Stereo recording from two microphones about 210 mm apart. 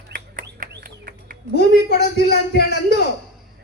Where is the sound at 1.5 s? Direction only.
50° left (ahead or behind).